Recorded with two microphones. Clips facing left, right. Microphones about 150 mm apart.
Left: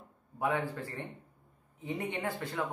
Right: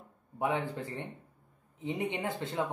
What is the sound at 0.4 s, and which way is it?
Speech, 20° right (ahead or behind).